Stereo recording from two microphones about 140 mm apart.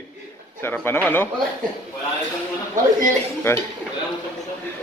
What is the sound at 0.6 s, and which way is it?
Speech, 15° left (ahead or behind).